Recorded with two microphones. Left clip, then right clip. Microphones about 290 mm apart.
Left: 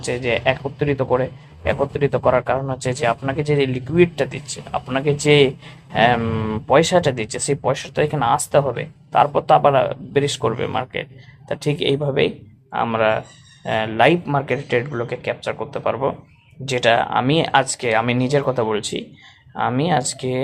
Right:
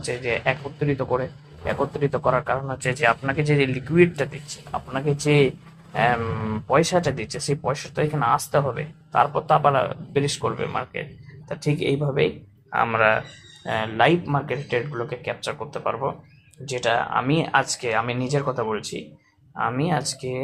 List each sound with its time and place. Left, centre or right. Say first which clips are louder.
0.0 s speech: left 5 dB; centre